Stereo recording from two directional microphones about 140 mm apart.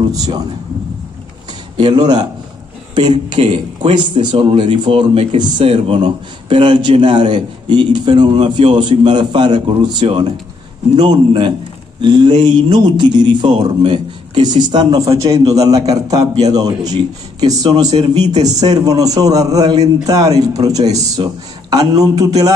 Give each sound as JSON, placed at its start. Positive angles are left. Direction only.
{"t": 0.1, "sound": "a man's voice", "side_deg": -25}
{"t": 1.8, "sound": "a man's voice", "side_deg": -35}
{"t": 17.9, "sound": "speech", "side_deg": -50}
{"t": 18.6, "sound": "a man's voice", "side_deg": -30}
{"t": 20.8, "sound": "speech", "side_deg": -50}
{"t": 21.2, "sound": "a man's voice", "side_deg": -30}